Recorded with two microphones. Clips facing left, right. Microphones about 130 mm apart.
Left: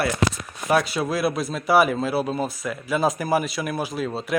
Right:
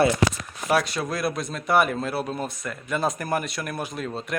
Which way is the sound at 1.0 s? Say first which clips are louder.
Left 4 dB; 5° left (ahead or behind).